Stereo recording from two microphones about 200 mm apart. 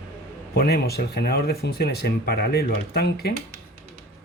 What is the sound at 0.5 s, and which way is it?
Speech, 55° left (ahead or behind).